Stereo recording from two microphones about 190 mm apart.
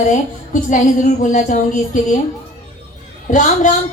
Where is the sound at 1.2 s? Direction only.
40° left (ahead or behind).